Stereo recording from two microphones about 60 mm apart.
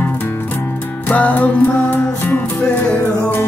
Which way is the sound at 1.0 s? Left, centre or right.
Left.